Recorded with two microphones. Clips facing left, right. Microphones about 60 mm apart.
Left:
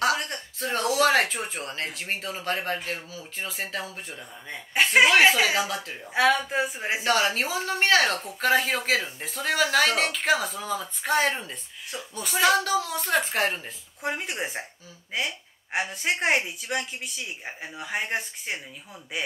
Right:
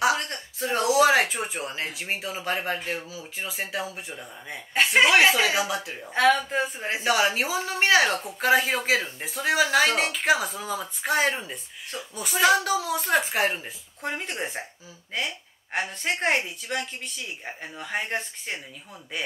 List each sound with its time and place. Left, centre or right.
0.2 s speech: centre
4.7 s a woman's voice: centre
6.1 s a woman's voice: centre
7.1 s speech: centre
14.0 s a woman's voice: centre